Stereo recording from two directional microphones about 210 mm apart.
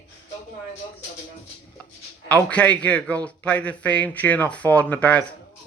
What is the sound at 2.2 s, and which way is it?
A man's voice, 5° left (ahead or behind).